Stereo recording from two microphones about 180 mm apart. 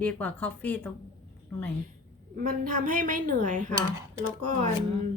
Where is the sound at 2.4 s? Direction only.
50° right (ahead or behind).